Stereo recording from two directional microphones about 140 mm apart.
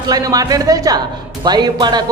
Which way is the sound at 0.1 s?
25° right (ahead or behind).